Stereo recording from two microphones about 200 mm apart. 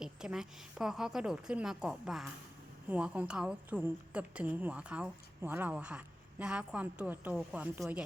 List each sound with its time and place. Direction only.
0.0 s a woman's voice: 5° right (ahead or behind)